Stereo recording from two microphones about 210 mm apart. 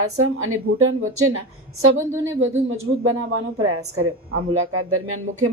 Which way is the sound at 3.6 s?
85° right.